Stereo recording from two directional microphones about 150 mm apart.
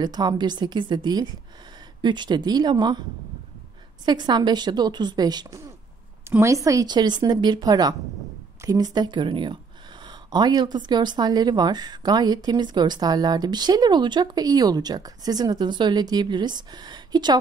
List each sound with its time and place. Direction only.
0.0 s speech: 30° right (ahead or behind)
10.0 s a sound: 30° right (ahead or behind)
10.9 s speech: 30° right (ahead or behind)